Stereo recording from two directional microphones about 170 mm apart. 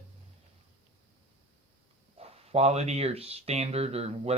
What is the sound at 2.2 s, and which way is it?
Speech, 40° right (ahead or behind).